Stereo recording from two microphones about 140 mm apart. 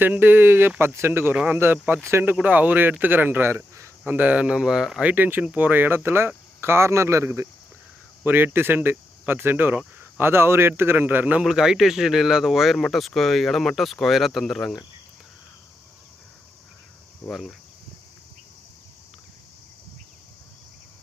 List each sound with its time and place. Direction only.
0.0 s speech: 15° right (ahead or behind)
17.2 s speech: centre (ahead or behind)